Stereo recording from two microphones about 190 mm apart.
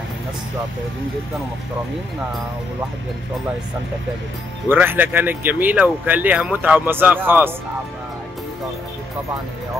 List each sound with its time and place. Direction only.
4.6 s speech: 10° right (ahead or behind)